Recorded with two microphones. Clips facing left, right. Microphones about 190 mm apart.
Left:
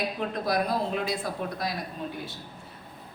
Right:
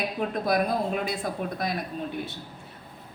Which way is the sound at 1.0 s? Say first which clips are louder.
Right 1 dB; 50° right (ahead or behind).